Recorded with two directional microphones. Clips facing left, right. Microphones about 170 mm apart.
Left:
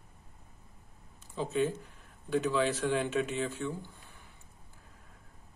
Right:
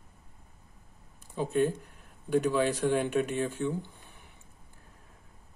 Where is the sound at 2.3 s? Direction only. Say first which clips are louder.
Right 3 dB; 15° right (ahead or behind).